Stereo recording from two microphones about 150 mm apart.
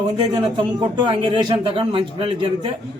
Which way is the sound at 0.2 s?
30° right (ahead or behind).